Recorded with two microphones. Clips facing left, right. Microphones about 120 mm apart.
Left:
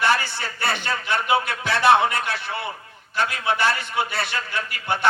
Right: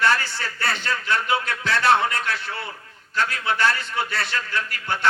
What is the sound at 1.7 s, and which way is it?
Speech, 60° left (ahead or behind).